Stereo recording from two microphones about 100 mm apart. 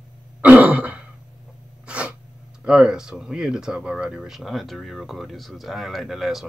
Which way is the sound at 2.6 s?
5° right (ahead or behind).